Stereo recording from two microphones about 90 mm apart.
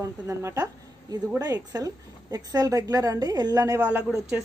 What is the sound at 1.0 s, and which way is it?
Speech, 45° right (ahead or behind).